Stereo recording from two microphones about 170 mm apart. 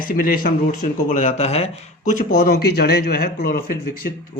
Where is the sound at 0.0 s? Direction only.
55° left (ahead or behind); by 2.1 s 35° left (ahead or behind).